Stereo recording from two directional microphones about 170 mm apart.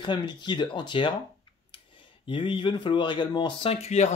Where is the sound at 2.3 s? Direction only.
30° left (ahead or behind).